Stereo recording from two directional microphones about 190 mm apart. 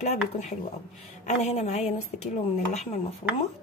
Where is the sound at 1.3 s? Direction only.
35° left (ahead or behind).